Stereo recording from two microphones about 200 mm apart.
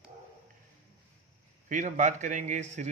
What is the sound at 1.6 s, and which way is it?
Speech, 40° right (ahead or behind).